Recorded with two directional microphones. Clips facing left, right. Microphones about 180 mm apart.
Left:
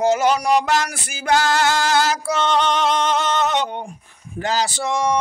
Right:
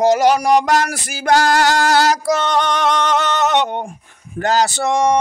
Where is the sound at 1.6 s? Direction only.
65° right (ahead or behind).